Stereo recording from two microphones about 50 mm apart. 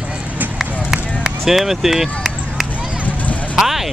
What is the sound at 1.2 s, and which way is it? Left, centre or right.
Run, centre.